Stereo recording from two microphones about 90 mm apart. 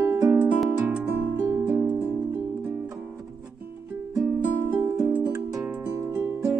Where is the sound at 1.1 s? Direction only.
25° right (ahead or behind).